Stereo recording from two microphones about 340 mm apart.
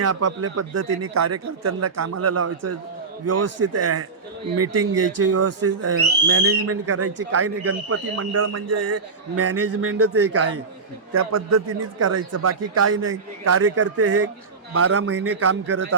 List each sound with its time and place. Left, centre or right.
0.0 s a man's voice: right